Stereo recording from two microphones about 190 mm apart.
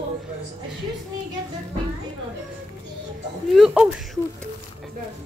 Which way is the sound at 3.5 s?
Centre (ahead or behind).